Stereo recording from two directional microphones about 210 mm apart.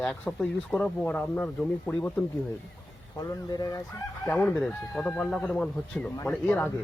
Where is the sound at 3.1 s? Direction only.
20° left (ahead or behind).